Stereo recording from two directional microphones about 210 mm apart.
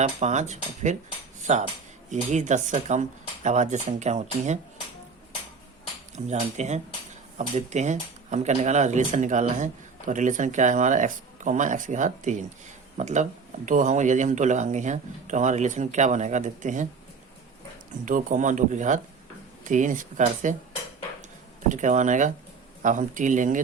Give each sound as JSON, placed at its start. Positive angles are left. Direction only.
{"t": 0.0, "sound": "speech", "side_deg": -35}
{"t": 1.4, "sound": "cutlery", "side_deg": -35}
{"t": 2.0, "sound": "speech", "side_deg": -35}
{"t": 6.1, "sound": "speech", "side_deg": -35}
{"t": 18.0, "sound": "speech", "side_deg": -40}
{"t": 21.7, "sound": "speech", "side_deg": -35}